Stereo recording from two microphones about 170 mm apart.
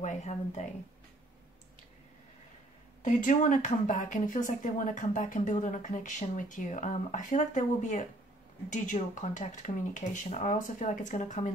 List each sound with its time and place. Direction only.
0.0 s speech: 45° left (ahead or behind)
3.0 s speech: 50° left (ahead or behind)